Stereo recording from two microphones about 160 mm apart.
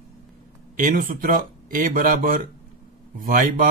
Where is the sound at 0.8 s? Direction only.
60° right (ahead or behind).